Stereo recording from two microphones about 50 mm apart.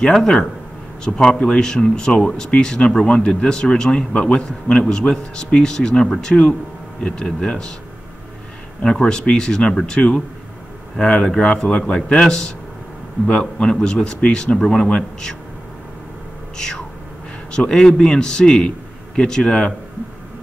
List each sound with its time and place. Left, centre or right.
0.0 s speech: centre
8.8 s speech: centre
16.5 s a sound: centre
17.5 s a man's voice: centre